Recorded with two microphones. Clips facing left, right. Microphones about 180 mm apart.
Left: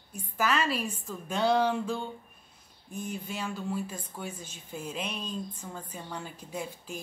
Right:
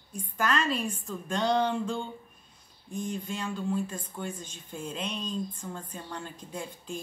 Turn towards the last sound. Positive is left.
turn(degrees=5)  # may be behind; listen again after turning